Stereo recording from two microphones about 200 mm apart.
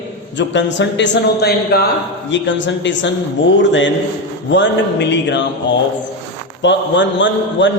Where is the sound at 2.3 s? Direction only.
65° left (ahead or behind).